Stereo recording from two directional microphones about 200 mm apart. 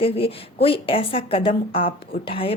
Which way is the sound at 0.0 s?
30° left (ahead or behind).